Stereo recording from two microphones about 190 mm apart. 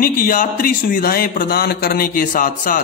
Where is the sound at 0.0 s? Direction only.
45° left (ahead or behind).